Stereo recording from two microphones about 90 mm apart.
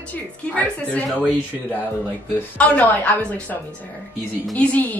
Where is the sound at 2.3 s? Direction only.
15° left (ahead or behind).